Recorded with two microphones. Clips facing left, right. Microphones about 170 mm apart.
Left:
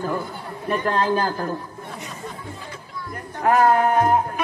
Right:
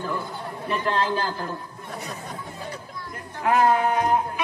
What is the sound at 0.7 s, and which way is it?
Speech, 45° left (ahead or behind).